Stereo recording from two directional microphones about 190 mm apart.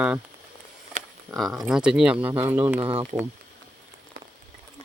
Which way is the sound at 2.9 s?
30° right (ahead or behind).